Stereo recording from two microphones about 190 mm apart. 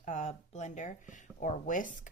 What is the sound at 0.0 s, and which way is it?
Speech, 40° left (ahead or behind).